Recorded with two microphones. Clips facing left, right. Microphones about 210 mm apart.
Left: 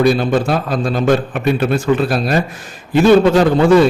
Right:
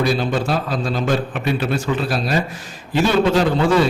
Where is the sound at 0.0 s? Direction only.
55° left (ahead or behind).